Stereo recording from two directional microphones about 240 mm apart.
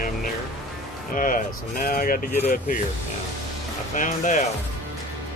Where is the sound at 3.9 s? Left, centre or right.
Left.